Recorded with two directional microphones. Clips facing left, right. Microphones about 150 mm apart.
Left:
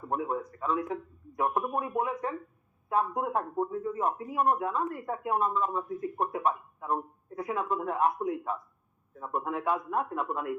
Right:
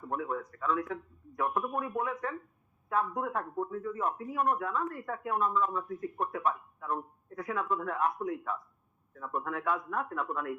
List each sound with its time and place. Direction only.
0.1 s speech: 25° left (ahead or behind)